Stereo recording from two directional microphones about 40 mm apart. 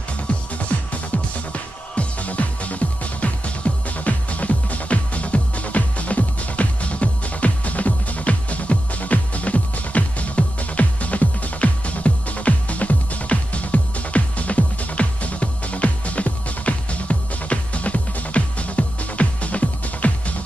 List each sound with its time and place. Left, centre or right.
0.3 s music: left
1.1 s music: left